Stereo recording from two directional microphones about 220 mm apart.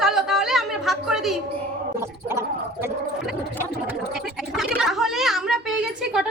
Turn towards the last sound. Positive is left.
turn(degrees=-5)  # may be behind; listen again after turning